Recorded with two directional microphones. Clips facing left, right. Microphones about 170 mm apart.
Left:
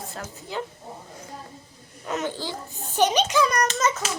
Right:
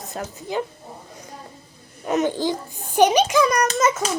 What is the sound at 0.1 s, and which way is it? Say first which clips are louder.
Speech: right 8 dB; 20° right (ahead or behind).